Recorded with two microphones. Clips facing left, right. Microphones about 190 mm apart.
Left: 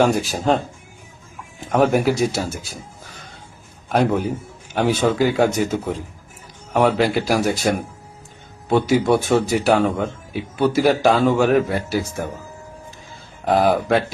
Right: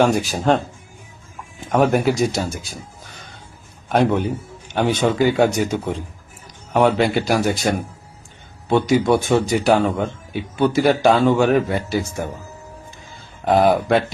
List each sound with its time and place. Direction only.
0.0 s speech: centre (ahead or behind)
1.8 s speech: centre (ahead or behind)
3.8 s speech: centre (ahead or behind)
13.4 s speech: centre (ahead or behind)